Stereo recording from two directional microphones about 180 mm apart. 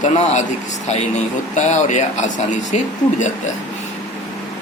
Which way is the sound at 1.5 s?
40° left (ahead or behind).